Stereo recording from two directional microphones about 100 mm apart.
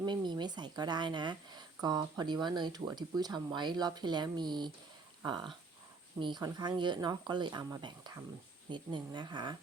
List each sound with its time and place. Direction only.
0.0 s speech: 50° right (ahead or behind)